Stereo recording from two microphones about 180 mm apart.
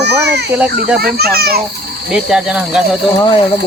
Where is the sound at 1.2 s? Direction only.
60° right (ahead or behind).